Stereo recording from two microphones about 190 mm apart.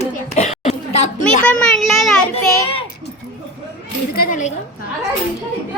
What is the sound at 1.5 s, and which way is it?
Child singing, 5° left (ahead or behind).